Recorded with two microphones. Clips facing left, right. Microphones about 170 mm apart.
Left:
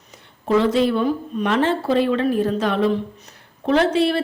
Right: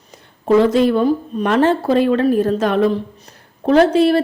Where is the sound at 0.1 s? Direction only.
45° right (ahead or behind).